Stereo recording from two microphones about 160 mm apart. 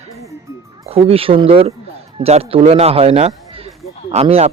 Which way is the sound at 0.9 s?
35° right (ahead or behind).